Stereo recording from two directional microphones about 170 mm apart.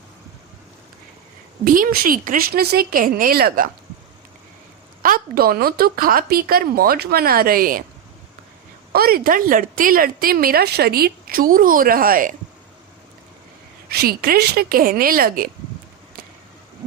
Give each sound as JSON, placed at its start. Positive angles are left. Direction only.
{"t": 1.6, "sound": "a woman's voice", "side_deg": -55}
{"t": 5.0, "sound": "a woman's voice", "side_deg": -60}
{"t": 8.9, "sound": "a woman's voice", "side_deg": -60}
{"t": 13.8, "sound": "a woman's voice", "side_deg": -70}